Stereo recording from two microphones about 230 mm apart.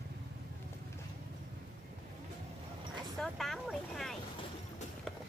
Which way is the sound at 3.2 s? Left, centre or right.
Centre.